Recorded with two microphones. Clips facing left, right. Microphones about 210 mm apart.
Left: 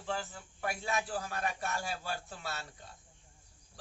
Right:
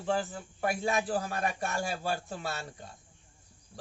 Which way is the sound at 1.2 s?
40° right (ahead or behind).